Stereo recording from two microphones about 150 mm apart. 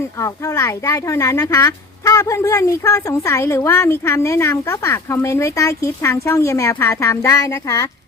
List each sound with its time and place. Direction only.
0.2 s speech: 20° left (ahead or behind)